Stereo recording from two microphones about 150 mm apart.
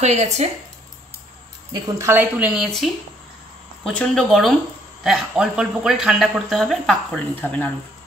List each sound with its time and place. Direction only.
0.0 s speech: 50° right (ahead or behind)
1.7 s speech: 20° right (ahead or behind); by 7.0 s centre (ahead or behind)
7.3 s speech: 10° left (ahead or behind)